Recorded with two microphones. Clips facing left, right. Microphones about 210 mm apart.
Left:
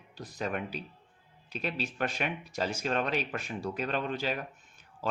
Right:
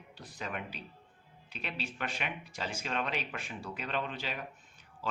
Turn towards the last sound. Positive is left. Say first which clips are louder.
# left 4 dB
turn(degrees=45)  # may be behind; listen again after turning